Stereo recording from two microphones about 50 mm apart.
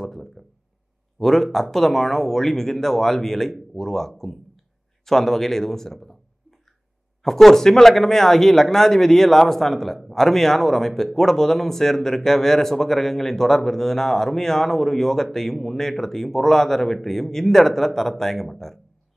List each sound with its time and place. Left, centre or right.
0.0 s speech: centre
7.2 s speech: centre